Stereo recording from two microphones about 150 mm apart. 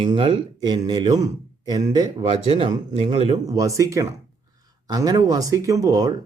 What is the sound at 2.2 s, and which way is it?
Speech, 35° right (ahead or behind).